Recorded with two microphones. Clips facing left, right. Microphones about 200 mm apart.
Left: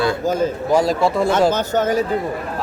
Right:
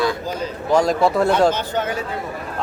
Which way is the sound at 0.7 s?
Centre (ahead or behind).